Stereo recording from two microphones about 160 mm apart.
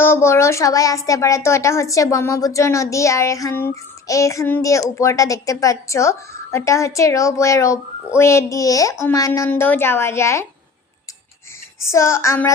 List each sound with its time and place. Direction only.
0.0 s a child's voice: 15° left (ahead or behind)
11.8 s child singing: 15° left (ahead or behind)